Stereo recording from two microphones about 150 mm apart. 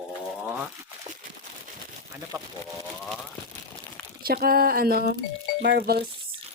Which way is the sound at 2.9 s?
Centre (ahead or behind).